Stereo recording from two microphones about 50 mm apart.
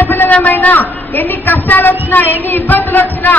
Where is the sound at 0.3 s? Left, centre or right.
Left.